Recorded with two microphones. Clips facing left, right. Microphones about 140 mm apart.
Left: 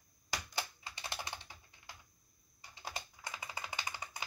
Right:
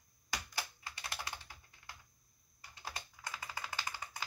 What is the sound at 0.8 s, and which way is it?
Computer keyboard, 20° left (ahead or behind).